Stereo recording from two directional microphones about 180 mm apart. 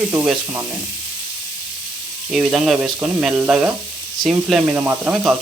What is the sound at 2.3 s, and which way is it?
Speech, centre (ahead or behind).